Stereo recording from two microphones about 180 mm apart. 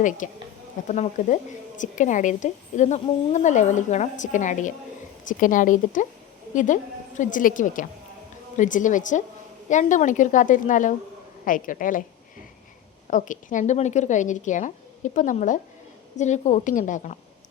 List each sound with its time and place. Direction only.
0.0 s a woman's voice: 45° left (ahead or behind)
13.1 s a woman's voice: 45° left (ahead or behind)